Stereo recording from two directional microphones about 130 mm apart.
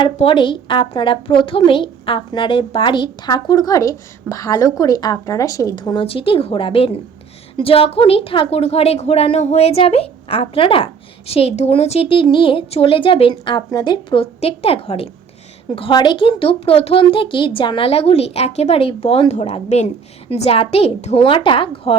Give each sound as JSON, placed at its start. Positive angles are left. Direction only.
{"t": 0.0, "sound": "a woman's voice", "side_deg": 40}
{"t": 13.6, "sound": "speech", "side_deg": 30}